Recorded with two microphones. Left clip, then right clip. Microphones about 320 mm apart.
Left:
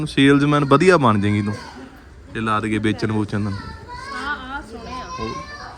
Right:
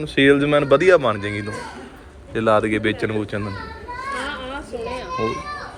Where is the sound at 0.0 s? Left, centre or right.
Centre.